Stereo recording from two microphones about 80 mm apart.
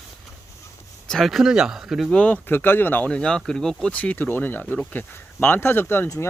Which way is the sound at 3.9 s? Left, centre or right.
Centre.